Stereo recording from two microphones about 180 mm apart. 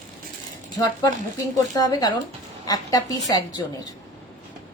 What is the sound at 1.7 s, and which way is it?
Speech, 20° left (ahead or behind).